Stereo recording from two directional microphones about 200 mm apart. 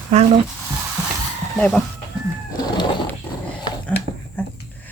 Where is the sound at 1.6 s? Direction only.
Centre (ahead or behind).